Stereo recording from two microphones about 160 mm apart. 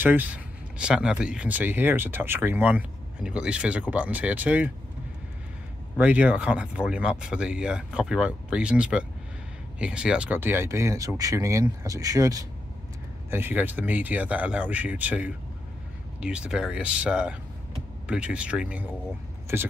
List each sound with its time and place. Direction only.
0.0 s speech: 10° right (ahead or behind)
5.9 s speech: 10° right (ahead or behind)